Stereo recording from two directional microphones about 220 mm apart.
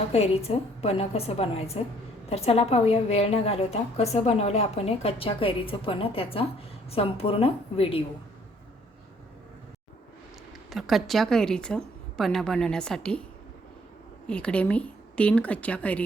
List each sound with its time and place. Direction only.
0.1 s a woman's voice: 25° left (ahead or behind)
10.7 s a woman's voice: centre (ahead or behind)
14.3 s a woman's voice: 5° left (ahead or behind)